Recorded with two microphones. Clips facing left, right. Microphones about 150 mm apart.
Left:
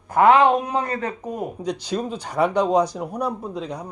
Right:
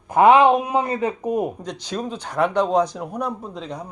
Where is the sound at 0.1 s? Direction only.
20° right (ahead or behind).